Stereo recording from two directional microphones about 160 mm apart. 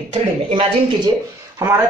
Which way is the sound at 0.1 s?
40° right (ahead or behind).